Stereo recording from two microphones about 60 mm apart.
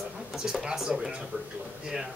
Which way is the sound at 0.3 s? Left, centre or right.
Centre.